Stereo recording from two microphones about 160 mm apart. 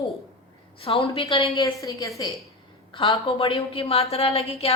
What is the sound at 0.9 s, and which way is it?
Speech, 35° left (ahead or behind).